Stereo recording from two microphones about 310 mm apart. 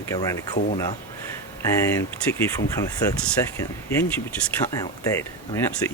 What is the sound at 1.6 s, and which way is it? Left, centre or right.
Speech, centre.